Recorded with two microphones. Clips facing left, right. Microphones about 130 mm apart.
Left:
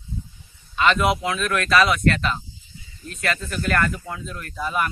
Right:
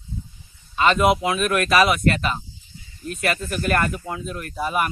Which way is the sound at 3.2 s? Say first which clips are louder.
Right 2 dB; 20° right (ahead or behind).